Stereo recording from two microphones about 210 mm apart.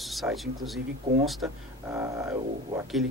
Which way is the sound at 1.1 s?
30° right (ahead or behind).